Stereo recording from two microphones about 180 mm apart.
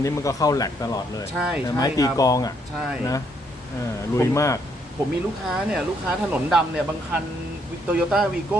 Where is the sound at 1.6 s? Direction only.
20° left (ahead or behind).